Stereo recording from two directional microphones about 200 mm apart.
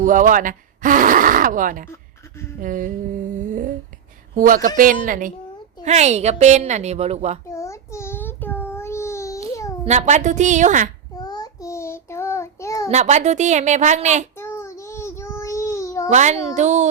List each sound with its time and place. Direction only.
0.0 s a woman's voice: 40° right (ahead or behind)
4.4 s a woman's voice: 45° right (ahead or behind)
7.5 s child singing: 15° left (ahead or behind)
9.8 s a woman's voice: 35° right (ahead or behind)
11.1 s child singing: 20° left (ahead or behind)
12.9 s a woman's voice: 35° right (ahead or behind)
14.3 s child singing: 15° left (ahead or behind)
16.0 s a woman's voice: 35° right (ahead or behind)